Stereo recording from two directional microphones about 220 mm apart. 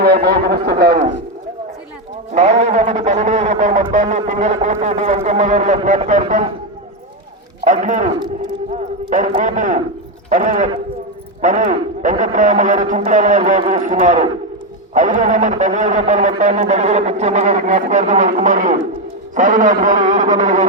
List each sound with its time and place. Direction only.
0.0 s a man's voice: 45° right (ahead or behind)
2.3 s music: 30° right (ahead or behind)
4.3 s a man's voice: 35° right (ahead or behind)
7.6 s speech: 35° right (ahead or behind)